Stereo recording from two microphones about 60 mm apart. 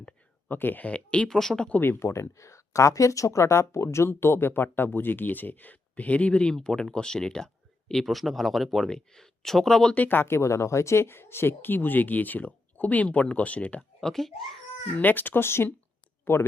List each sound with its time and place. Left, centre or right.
0.4 s speech: left
1.3 s speech: centre
1.8 s speech: left; by 9.9 s centre
9.9 s speech: left
14.0 s a child's voice: centre
14.9 s speech: left